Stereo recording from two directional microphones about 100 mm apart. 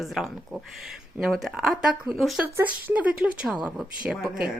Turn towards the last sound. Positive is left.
turn(degrees=-10)  # may be behind; listen again after turning